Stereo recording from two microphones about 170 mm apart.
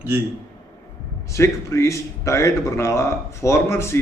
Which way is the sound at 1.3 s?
15° left (ahead or behind).